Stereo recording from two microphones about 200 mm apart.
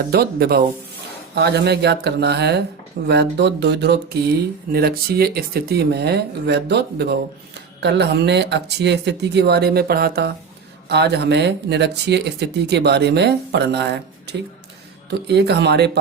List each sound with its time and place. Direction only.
0.1 s speech: 50° right (ahead or behind)